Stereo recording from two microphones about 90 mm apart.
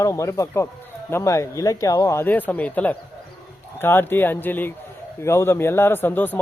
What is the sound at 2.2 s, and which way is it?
Speech, 20° left (ahead or behind).